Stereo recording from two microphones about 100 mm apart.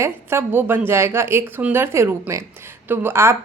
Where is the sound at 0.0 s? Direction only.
25° right (ahead or behind).